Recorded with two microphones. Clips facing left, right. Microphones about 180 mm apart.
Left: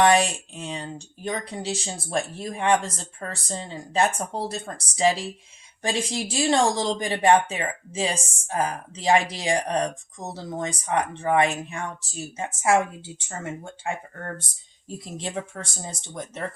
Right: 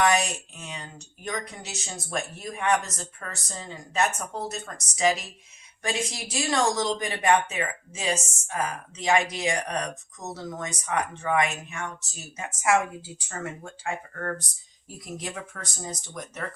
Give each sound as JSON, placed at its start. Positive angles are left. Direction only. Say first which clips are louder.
{"t": 0.0, "sound": "speech", "louder": "left 4 dB", "side_deg": 30}